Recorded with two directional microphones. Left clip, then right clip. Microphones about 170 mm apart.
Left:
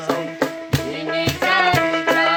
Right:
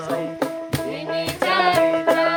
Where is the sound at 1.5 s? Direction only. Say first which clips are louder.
Even; 30° right (ahead or behind).